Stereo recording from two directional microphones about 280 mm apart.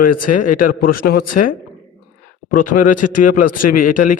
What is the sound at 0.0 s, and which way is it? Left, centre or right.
Speech, left.